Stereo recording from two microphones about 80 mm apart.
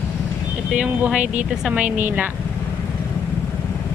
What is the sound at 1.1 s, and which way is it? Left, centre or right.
Speech, centre.